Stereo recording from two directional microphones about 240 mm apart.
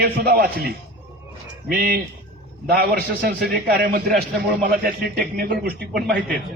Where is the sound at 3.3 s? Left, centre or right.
Right.